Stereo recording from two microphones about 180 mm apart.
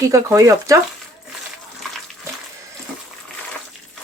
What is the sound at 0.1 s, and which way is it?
Speech, 15° right (ahead or behind).